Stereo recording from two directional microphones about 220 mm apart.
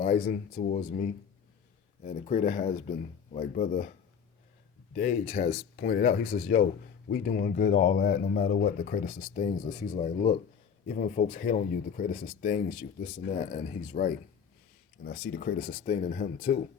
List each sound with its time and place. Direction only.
0.0 s speech: 40° left (ahead or behind)
4.9 s speech: 35° left (ahead or behind)